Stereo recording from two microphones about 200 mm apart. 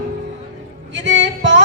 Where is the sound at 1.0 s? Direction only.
65° right (ahead or behind).